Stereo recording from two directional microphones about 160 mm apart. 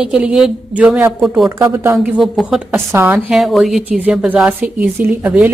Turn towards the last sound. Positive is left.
turn(degrees=-10)  # may be behind; listen again after turning